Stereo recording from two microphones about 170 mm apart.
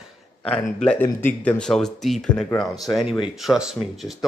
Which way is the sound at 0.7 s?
10° left (ahead or behind).